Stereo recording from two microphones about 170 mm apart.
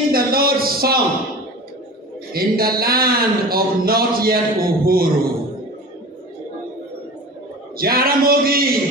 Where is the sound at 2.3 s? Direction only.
60° right (ahead or behind).